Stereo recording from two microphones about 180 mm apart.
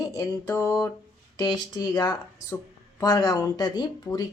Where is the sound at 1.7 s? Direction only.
20° left (ahead or behind).